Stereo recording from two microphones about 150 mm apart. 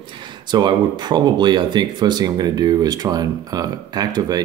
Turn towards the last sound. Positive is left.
turn(degrees=-25)  # may be behind; listen again after turning